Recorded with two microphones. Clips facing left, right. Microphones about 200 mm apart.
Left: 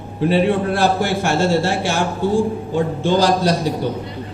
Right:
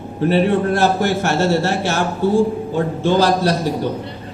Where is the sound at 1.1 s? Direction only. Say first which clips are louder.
Even; 10° left (ahead or behind).